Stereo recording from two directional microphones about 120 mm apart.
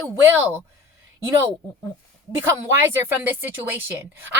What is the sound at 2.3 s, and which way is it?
Speech, 20° right (ahead or behind).